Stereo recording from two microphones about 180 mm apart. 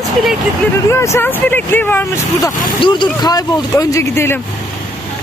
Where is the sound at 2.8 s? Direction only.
25° left (ahead or behind).